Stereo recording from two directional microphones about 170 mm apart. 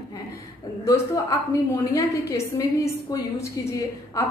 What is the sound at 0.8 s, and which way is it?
Speech, 20° left (ahead or behind).